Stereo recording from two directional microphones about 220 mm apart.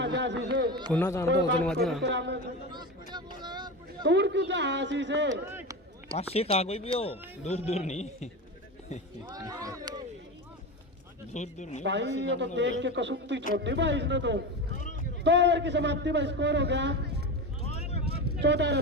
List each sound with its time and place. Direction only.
0.0 s a sound: 55° right (ahead or behind)
0.7 s a man's voice: 20° right (ahead or behind)
0.9 s speech: 10° left (ahead or behind)
2.0 s a man's voice: 55° right (ahead or behind)
2.7 s vehicle: 20° right (ahead or behind)
4.0 s a man's voice: 55° right (ahead or behind)
5.3 s speech: 15° right (ahead or behind)
6.1 s speech: 30° left (ahead or behind)
9.3 s speech: 15° right (ahead or behind)
11.3 s speech: 35° left (ahead or behind)
11.8 s a man's voice: 55° right (ahead or behind)
17.7 s vehicle: 30° left (ahead or behind)
18.1 s a sound: 50° right (ahead or behind)